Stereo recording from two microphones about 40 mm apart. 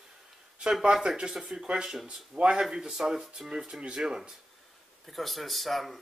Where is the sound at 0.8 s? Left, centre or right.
Centre.